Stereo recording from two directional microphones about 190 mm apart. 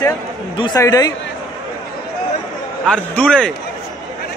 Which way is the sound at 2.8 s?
5° left (ahead or behind).